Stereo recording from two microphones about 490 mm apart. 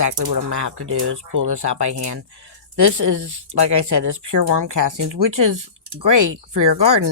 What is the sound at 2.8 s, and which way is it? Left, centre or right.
Speech, right.